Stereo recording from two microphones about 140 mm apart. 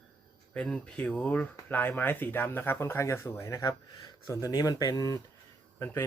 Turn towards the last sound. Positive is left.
turn(degrees=15)  # may be behind; listen again after turning